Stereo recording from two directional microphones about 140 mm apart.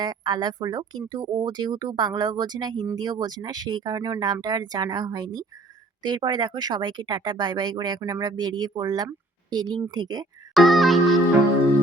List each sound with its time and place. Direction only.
0.0 s speech: 30° right (ahead or behind)
10.5 s music: centre (ahead or behind)